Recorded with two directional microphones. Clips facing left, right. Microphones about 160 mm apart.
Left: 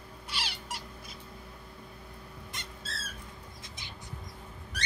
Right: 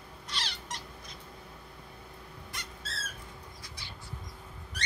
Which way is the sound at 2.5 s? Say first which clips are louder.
Right 1 dB; 20° left (ahead or behind).